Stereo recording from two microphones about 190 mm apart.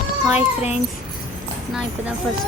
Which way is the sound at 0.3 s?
35° left (ahead or behind).